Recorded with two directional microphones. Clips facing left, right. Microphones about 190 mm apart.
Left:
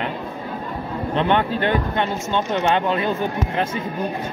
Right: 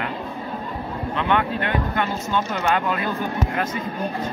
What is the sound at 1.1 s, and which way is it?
Speech, 30° left (ahead or behind).